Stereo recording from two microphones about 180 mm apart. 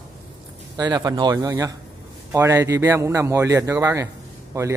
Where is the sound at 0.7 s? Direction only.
20° right (ahead or behind).